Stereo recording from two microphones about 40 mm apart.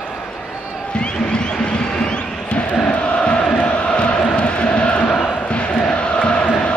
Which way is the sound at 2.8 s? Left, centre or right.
Left.